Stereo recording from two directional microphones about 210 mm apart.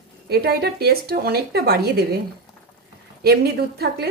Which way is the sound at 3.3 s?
50° right (ahead or behind).